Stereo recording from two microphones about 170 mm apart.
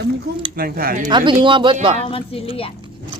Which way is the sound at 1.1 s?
25° right (ahead or behind).